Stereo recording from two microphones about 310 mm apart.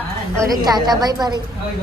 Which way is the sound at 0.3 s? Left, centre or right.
Centre.